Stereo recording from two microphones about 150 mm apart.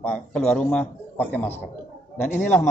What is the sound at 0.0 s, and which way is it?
A man's voice, 5° left (ahead or behind).